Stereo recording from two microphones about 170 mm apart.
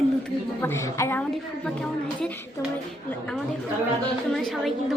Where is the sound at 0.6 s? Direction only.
15° left (ahead or behind).